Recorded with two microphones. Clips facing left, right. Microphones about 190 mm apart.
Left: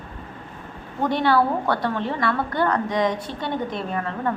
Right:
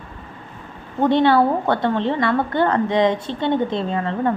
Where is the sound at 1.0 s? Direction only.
25° right (ahead or behind).